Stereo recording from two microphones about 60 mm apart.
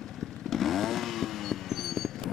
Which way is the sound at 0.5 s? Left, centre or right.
Centre.